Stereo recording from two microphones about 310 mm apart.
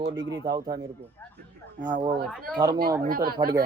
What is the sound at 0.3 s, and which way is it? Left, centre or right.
Speech, centre.